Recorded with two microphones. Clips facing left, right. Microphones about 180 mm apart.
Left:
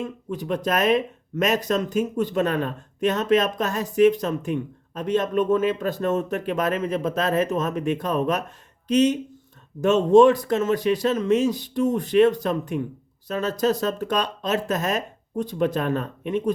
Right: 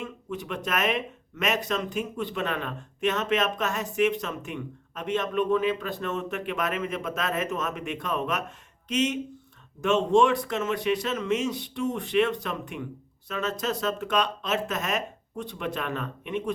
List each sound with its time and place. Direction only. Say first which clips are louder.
0.0 s speech: left 5 dB; 35° left (ahead or behind)